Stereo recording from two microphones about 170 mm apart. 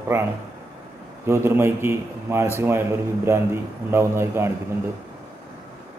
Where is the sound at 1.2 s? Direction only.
15° right (ahead or behind).